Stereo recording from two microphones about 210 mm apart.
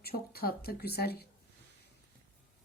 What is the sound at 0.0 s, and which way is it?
Speech, 45° left (ahead or behind).